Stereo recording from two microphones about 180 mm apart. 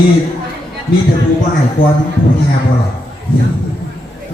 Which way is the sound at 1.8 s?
50° left (ahead or behind).